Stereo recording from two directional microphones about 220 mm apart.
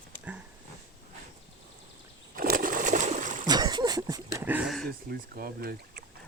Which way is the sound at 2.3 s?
40° right (ahead or behind).